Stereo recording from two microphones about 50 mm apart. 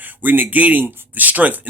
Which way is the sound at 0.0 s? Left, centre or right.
Right.